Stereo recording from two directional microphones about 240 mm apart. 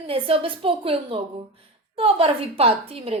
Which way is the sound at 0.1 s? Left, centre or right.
Right.